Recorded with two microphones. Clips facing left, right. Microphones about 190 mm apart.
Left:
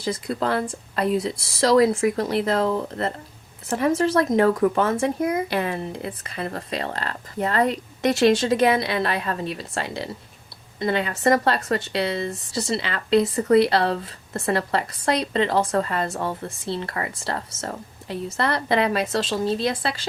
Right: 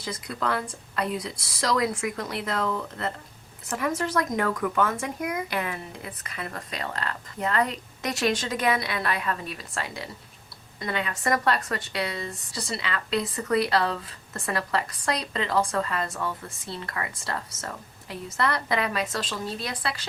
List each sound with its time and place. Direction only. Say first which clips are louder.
0.0 s speech: left 6 dB; 30° left (ahead or behind)